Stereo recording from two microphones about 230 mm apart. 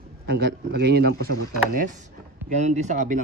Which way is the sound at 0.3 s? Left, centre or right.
Right.